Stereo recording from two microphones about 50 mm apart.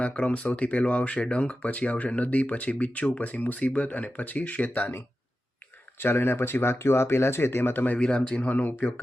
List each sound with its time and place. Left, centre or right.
0.0 s speech: left
6.0 s speech: left
7.9 s speech: left
8.4 s speech: left